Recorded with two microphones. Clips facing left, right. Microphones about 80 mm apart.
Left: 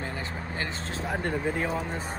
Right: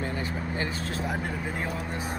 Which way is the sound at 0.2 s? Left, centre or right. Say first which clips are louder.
Right 3 dB; left.